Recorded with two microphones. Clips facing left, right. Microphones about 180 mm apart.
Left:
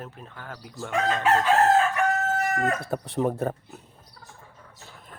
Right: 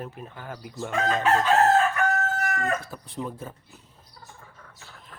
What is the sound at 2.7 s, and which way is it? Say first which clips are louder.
Speech: left 6 dB; 65° left (ahead or behind).